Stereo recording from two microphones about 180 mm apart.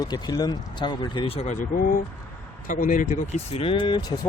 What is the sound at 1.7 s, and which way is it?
Speech, 50° left (ahead or behind).